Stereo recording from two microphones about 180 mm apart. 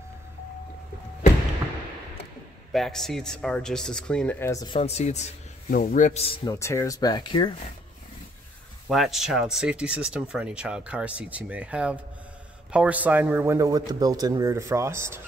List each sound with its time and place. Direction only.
2.7 s speech: centre (ahead or behind); by 4.7 s 20° left (ahead or behind)
4.7 s a man's voice: 35° left (ahead or behind)
8.8 s a man's voice: centre (ahead or behind)